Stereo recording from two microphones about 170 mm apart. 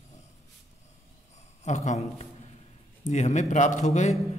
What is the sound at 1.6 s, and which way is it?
Speech, 45° left (ahead or behind).